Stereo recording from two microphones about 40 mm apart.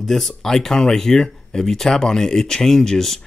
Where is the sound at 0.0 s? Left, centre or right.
Centre.